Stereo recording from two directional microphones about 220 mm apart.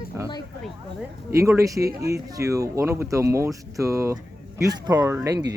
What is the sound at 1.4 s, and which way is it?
Speech, 15° right (ahead or behind).